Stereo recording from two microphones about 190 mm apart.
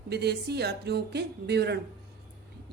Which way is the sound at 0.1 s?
60° right (ahead or behind).